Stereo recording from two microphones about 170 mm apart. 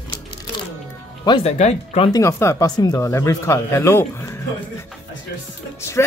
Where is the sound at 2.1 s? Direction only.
15° left (ahead or behind).